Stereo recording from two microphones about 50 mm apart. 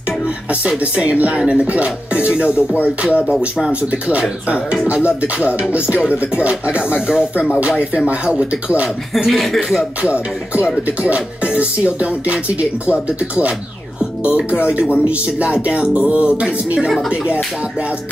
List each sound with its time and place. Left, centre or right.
0.5 s music: right
3.3 s speech: centre
3.9 s music: right
9.1 s speech: centre
10.0 s music: right
14.2 s music: right